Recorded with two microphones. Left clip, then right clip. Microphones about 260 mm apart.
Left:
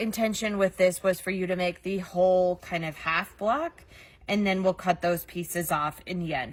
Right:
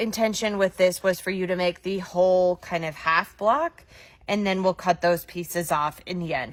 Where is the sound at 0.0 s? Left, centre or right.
Right.